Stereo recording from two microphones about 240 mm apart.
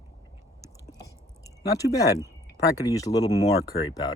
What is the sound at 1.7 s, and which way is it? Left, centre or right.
Speech, centre.